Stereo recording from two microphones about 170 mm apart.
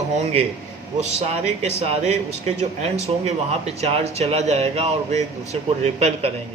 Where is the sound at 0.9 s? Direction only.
40° right (ahead or behind).